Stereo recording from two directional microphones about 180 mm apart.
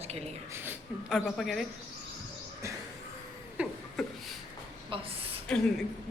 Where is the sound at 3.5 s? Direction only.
Centre (ahead or behind).